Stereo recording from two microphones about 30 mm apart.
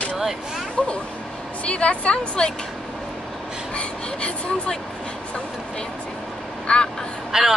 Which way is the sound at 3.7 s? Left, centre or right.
Left.